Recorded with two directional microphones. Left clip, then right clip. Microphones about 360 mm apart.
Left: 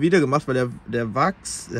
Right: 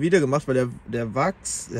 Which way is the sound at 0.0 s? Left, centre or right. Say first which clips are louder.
Left 2 dB; centre.